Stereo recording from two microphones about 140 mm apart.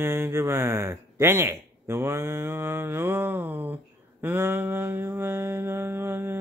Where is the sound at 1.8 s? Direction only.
20° right (ahead or behind).